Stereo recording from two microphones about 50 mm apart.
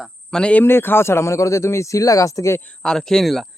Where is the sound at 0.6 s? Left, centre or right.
Left.